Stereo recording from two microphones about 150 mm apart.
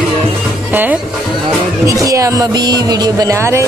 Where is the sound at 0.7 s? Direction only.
10° right (ahead or behind).